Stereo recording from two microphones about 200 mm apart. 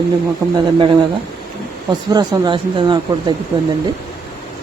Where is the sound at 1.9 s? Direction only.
20° right (ahead or behind).